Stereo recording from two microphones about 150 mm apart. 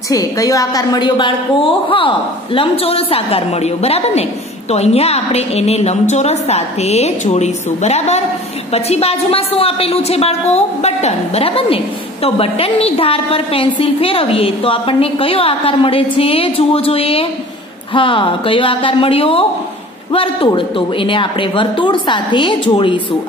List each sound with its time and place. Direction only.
0.1 s a woman's voice: 25° left (ahead or behind)